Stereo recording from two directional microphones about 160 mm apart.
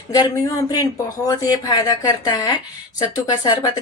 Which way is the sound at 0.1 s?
20° left (ahead or behind).